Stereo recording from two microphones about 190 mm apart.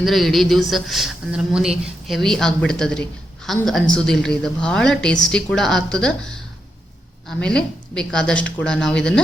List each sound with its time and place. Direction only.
0.0 s speech: centre (ahead or behind)